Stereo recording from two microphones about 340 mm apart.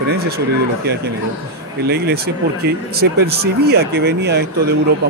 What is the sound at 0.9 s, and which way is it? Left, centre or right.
Speech, right.